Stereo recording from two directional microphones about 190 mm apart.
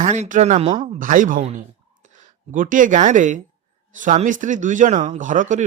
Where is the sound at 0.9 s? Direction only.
45° right (ahead or behind).